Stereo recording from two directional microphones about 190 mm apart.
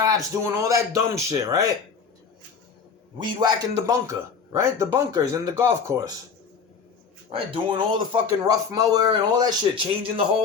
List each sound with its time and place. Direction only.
0.0 s a man's voice: 20° right (ahead or behind)
3.2 s a man's voice: 20° right (ahead or behind)
7.3 s speech: 25° right (ahead or behind)